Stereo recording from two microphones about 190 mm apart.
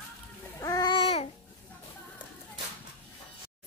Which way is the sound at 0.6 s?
20° left (ahead or behind).